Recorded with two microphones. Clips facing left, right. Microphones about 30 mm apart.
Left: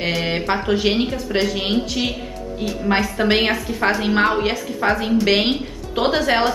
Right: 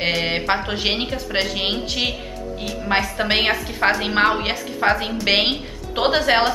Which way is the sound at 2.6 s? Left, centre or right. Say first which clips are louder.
Left 2 dB; centre.